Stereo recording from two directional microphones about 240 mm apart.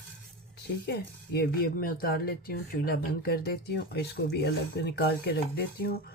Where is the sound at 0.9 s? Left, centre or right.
Left.